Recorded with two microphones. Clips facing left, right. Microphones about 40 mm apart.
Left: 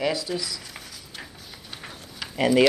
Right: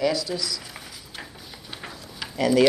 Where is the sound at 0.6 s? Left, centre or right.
Centre.